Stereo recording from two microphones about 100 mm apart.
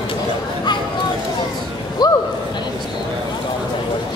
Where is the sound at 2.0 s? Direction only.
45° left (ahead or behind).